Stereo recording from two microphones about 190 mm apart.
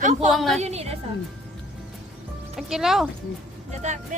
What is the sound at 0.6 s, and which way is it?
Speech, 35° right (ahead or behind).